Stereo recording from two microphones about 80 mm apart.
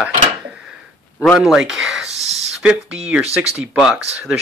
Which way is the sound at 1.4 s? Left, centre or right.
Centre.